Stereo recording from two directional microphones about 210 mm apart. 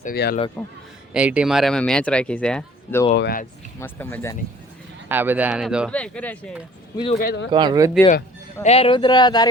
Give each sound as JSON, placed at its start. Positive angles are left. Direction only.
{"t": 0.0, "sound": "speech", "side_deg": 45}
{"t": 0.6, "sound": "speech", "side_deg": 5}
{"t": 1.1, "sound": "speech", "side_deg": -5}
{"t": 3.2, "sound": "speech", "side_deg": 50}
{"t": 3.8, "sound": "speech", "side_deg": 10}
{"t": 5.0, "sound": "speech", "side_deg": -10}
{"t": 5.9, "sound": "speech", "side_deg": 5}
{"t": 6.9, "sound": "speech", "side_deg": 25}
{"t": 7.2, "sound": "speech", "side_deg": 45}
{"t": 7.5, "sound": "speech", "side_deg": -20}
{"t": 8.6, "sound": "speech", "side_deg": 30}